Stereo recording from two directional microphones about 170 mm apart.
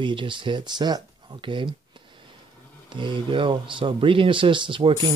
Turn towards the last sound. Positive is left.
turn(degrees=-30)  # may be behind; listen again after turning